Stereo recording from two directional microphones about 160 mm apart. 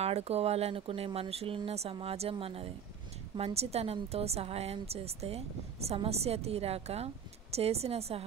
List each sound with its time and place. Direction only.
0.0 s a woman's voice: 40° right (ahead or behind)